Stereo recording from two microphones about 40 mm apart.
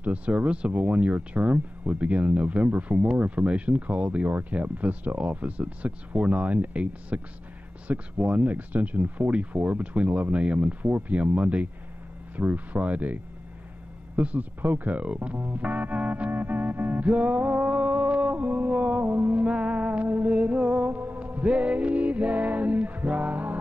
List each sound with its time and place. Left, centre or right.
0.0 s speech: right
14.1 s music: right
14.9 s speech: right
15.3 s music: right
17.0 s speech: right
17.6 s a sound: right
17.8 s music: right
19.4 s music: right
20.9 s a sound: right
21.2 s music: right